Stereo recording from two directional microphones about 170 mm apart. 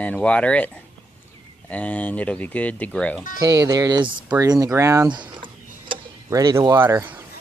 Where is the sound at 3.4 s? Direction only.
20° right (ahead or behind).